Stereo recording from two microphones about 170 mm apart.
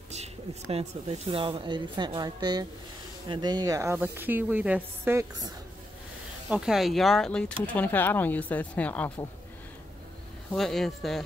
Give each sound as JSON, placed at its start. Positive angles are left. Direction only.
{"t": 0.1, "sound": "speech", "side_deg": -35}
{"t": 6.5, "sound": "speech", "side_deg": -5}
{"t": 10.5, "sound": "speech", "side_deg": 0}